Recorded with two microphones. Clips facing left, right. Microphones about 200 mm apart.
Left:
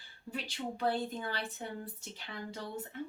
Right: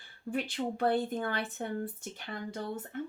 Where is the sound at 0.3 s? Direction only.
55° right (ahead or behind).